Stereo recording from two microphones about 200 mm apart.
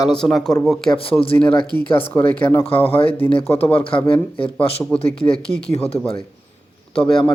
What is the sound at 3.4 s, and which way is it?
Speech, 10° left (ahead or behind).